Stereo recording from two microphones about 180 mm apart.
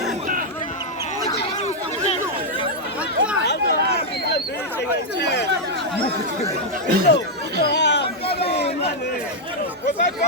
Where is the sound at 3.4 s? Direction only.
65° left (ahead or behind).